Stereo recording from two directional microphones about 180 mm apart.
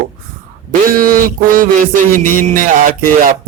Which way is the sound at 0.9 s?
50° right (ahead or behind).